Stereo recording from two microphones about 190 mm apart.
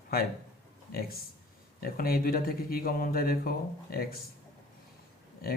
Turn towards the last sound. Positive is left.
turn(degrees=55)  # may be behind; listen again after turning